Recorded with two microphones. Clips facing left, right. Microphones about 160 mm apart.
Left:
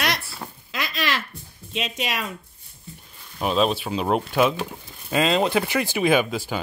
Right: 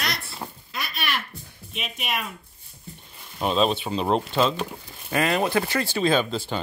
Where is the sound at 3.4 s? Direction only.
5° left (ahead or behind).